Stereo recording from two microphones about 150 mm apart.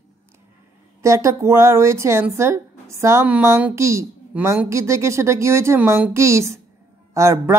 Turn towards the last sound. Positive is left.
turn(degrees=-20)  # may be behind; listen again after turning